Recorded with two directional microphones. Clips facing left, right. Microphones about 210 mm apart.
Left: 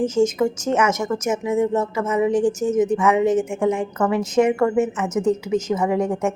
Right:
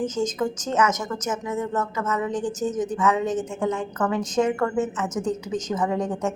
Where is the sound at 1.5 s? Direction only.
25° left (ahead or behind).